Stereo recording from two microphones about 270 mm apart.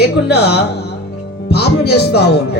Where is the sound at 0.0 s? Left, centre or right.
Left.